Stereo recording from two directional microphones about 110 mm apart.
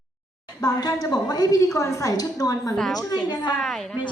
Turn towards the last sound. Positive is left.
turn(degrees=5)  # may be behind; listen again after turning